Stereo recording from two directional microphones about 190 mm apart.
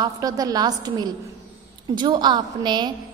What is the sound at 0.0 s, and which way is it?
A woman's voice, 20° right (ahead or behind).